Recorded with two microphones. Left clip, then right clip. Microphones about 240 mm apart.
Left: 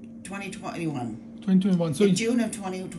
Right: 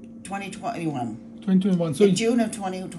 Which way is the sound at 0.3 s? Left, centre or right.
Centre.